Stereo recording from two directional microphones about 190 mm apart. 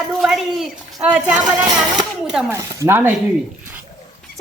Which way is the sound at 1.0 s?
5° right (ahead or behind).